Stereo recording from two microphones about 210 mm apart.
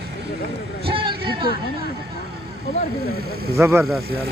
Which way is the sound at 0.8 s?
25° right (ahead or behind).